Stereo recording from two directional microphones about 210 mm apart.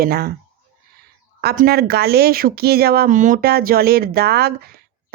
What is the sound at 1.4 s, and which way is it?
Speech, 45° right (ahead or behind).